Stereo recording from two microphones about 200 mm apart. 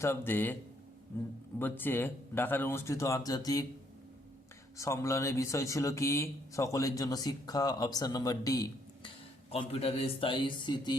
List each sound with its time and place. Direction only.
0.0 s speech: 10° left (ahead or behind)
4.8 s speech: 15° left (ahead or behind)
9.0 s speech: 30° left (ahead or behind)